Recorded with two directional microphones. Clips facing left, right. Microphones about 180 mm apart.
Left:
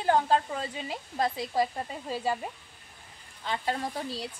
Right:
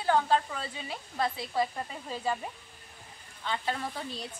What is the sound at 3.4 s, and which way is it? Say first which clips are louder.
Speech: left 2 dB; 35° left (ahead or behind).